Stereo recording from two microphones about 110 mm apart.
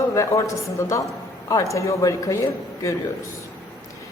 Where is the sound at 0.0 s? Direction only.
30° left (ahead or behind).